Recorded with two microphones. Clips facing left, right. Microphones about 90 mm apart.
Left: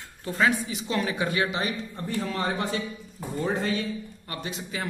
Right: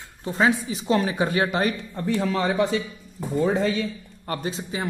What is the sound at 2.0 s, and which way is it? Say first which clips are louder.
Speech: right 7 dB; 85° right.